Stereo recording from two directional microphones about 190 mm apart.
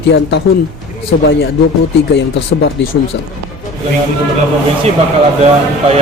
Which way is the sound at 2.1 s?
65° left (ahead or behind).